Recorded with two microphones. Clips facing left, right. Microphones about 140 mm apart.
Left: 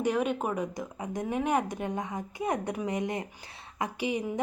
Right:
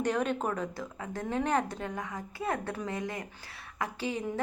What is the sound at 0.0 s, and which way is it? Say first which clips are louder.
A woman's voice: left 2 dB; 10° left (ahead or behind).